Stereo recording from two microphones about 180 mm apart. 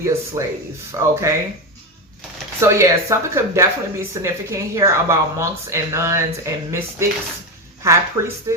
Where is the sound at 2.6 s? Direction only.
15° right (ahead or behind).